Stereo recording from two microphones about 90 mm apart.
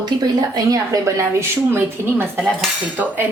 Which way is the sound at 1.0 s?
35° right (ahead or behind).